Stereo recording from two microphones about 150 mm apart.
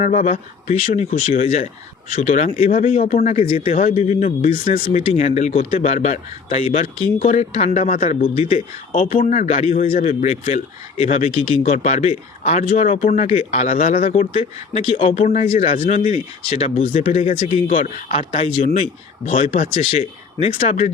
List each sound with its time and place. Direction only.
0.0 s speech: 50° left (ahead or behind)
3.7 s speech: 50° left (ahead or behind)
7.2 s speech: 55° left (ahead or behind)
9.1 s speech: 55° left (ahead or behind)
14.8 s speech: 35° left (ahead or behind)
15.2 s speech: 60° left (ahead or behind)
15.4 s speech: 45° left (ahead or behind)